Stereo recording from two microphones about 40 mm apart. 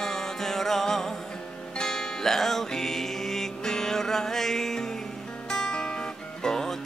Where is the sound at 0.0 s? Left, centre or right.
Centre.